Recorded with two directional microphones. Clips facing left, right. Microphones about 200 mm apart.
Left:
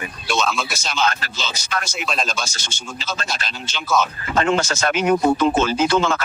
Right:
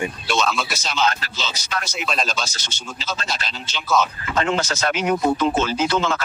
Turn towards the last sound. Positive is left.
turn(degrees=50)  # may be behind; listen again after turning